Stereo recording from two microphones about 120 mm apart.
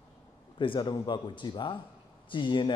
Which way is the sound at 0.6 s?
45° left (ahead or behind).